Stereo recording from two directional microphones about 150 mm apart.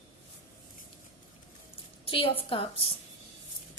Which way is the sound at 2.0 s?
35° left (ahead or behind).